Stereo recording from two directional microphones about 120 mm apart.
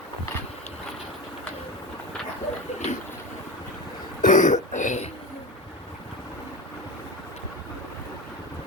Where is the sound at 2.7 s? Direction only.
75° left (ahead or behind).